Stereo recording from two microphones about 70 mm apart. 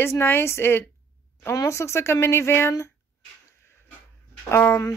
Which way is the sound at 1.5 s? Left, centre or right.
Left.